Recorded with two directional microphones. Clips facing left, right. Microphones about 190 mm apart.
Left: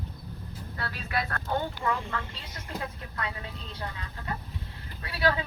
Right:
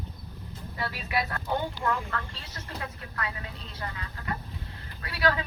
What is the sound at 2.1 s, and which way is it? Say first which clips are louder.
Speech: even; 15° left (ahead or behind).